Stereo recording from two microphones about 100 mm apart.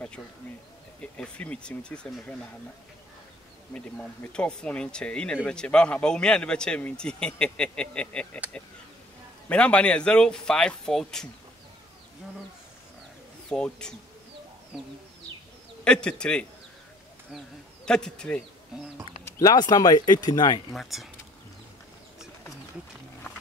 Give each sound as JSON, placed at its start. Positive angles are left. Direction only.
{"t": 1.1, "sound": "speech", "side_deg": 10}
{"t": 3.7, "sound": "speech", "side_deg": 15}
{"t": 9.5, "sound": "speech", "side_deg": 15}
{"t": 13.5, "sound": "speech", "side_deg": 5}
{"t": 15.8, "sound": "speech", "side_deg": 10}
{"t": 17.8, "sound": "speech", "side_deg": 10}
{"t": 19.4, "sound": "speech", "side_deg": 40}
{"t": 20.7, "sound": "speech", "side_deg": 0}